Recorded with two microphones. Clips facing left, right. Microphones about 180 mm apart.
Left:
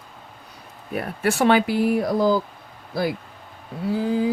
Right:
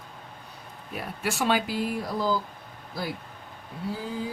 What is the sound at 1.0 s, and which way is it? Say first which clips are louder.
Speech: left 8 dB; 60° left (ahead or behind).